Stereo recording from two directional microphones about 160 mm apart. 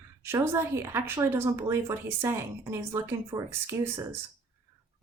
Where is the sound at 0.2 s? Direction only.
15° right (ahead or behind).